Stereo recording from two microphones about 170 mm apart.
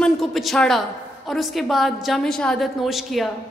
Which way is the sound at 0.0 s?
Centre (ahead or behind).